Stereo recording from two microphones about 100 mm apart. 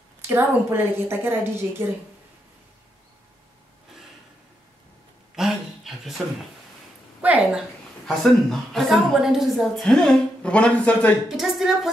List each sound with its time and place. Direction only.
0.3 s a woman's voice: 20° right (ahead or behind)
5.3 s a sound: 5° right (ahead or behind)
7.2 s a woman's voice: 15° right (ahead or behind)
8.2 s a woman's voice: 5° left (ahead or behind)
11.2 s a woman's voice: 5° right (ahead or behind)